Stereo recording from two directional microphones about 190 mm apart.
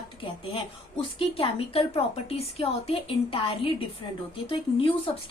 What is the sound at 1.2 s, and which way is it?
A woman's voice, 30° left (ahead or behind).